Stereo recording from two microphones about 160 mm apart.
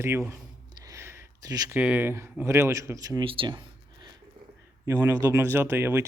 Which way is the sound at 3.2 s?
35° right (ahead or behind).